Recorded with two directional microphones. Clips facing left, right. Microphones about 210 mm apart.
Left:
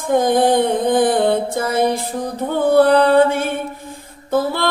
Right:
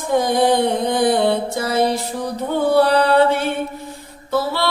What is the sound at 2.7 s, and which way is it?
Mantra, 50° left (ahead or behind).